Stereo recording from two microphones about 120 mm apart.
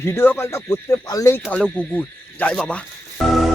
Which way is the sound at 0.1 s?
20° left (ahead or behind).